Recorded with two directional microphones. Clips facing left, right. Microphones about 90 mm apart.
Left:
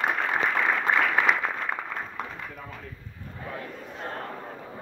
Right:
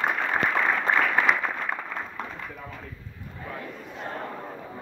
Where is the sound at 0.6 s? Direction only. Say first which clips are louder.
Even; 10° left (ahead or behind).